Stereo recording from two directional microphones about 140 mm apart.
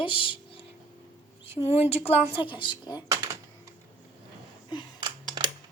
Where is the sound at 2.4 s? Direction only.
35° left (ahead or behind).